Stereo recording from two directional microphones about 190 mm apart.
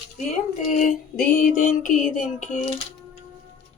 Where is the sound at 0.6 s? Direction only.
45° left (ahead or behind).